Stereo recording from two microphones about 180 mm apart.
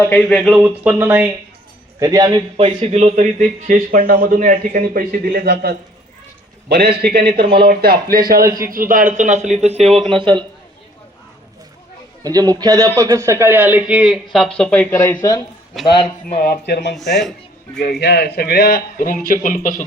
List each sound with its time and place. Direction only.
0.0 s speech: 10° left (ahead or behind); by 1.3 s 10° right (ahead or behind)
2.0 s a man's voice: 20° right (ahead or behind); by 3.2 s 35° right (ahead or behind)
3.7 s a man's voice: 50° right (ahead or behind)
7.3 s a man's voice: 30° right (ahead or behind)
7.6 s a man's voice: 60° right (ahead or behind); by 10.4 s 25° right (ahead or behind)
12.2 s a man's voice: 20° right (ahead or behind); by 15.4 s 20° left (ahead or behind)
16.0 s a man's voice: 55° left (ahead or behind)
16.9 s speech: centre (ahead or behind)
17.7 s a man's voice: 65° left (ahead or behind); by 19.8 s 45° left (ahead or behind)